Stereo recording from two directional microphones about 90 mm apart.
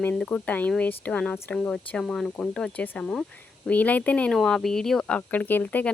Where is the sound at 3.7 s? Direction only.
15° left (ahead or behind).